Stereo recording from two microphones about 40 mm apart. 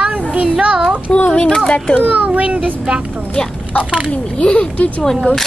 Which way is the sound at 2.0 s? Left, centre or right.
Right.